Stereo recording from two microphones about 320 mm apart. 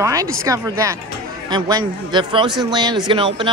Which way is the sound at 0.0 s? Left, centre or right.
Centre.